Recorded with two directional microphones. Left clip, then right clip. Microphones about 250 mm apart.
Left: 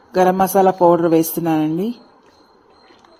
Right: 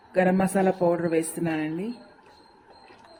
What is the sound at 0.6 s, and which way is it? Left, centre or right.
A man's voice, left.